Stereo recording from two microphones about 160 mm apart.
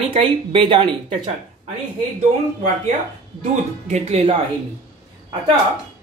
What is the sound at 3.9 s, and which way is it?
Speech, 40° right (ahead or behind).